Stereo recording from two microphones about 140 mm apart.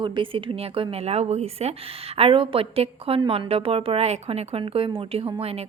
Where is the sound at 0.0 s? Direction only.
35° right (ahead or behind).